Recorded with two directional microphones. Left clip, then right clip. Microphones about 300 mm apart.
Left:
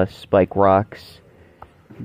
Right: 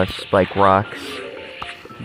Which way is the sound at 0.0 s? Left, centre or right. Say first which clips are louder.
Even; centre.